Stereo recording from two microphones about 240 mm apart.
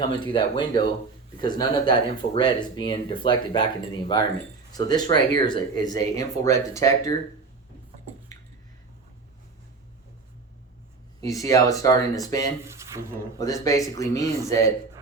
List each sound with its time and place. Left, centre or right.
0.0 s speech: centre
11.2 s speech: centre
12.6 s speech: centre
13.4 s speech: centre